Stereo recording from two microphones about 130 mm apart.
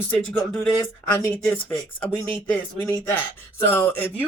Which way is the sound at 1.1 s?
15° left (ahead or behind).